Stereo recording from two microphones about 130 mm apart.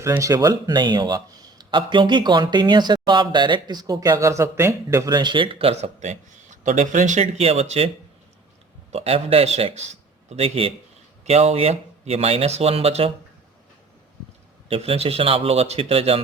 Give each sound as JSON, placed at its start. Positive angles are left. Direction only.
{"t": 0.0, "sound": "speech", "side_deg": -25}
{"t": 8.9, "sound": "a man's voice", "side_deg": -50}
{"t": 14.7, "sound": "speech", "side_deg": -50}